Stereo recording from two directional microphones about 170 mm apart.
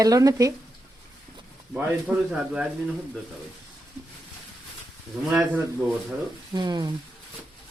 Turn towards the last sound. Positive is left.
turn(degrees=-25)  # may be behind; listen again after turning